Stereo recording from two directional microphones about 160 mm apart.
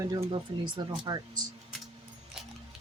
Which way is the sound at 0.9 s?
25° right (ahead or behind).